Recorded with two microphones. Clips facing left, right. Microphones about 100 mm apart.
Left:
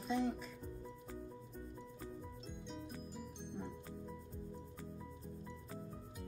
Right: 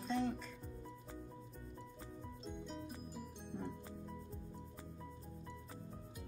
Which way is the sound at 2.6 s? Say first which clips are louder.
Left 2 dB; 5° right (ahead or behind).